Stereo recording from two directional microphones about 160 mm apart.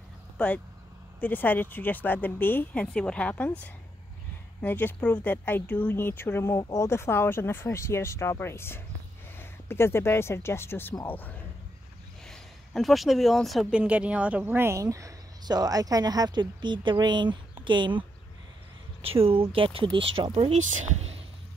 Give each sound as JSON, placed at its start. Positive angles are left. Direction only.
{"t": 1.2, "sound": "speech", "side_deg": 10}
{"t": 19.0, "sound": "speech", "side_deg": -35}